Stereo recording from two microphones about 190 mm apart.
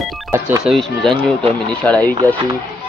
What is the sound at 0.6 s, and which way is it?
Speech, centre (ahead or behind).